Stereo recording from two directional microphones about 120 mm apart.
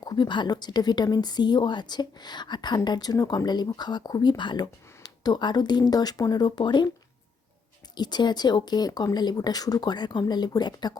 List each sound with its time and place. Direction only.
0.0 s a woman's voice: 35° left (ahead or behind)
7.9 s a woman's voice: 35° left (ahead or behind)